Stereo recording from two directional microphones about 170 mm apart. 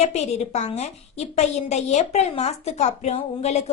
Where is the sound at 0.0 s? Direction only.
40° left (ahead or behind).